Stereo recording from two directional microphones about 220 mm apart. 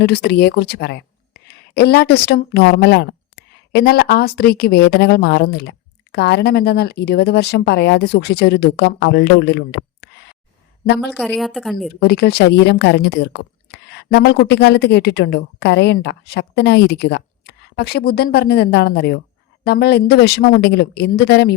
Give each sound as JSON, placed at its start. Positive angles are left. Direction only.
{"t": 0.0, "sound": "speech", "side_deg": 50}
{"t": 11.1, "sound": "speech", "side_deg": 0}
{"t": 11.9, "sound": "speech", "side_deg": 45}